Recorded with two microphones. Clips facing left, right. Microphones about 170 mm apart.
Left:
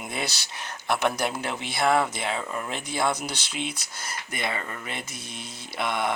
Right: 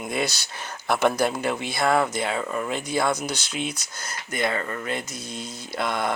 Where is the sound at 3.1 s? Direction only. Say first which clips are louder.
Right 3 dB; 30° left (ahead or behind).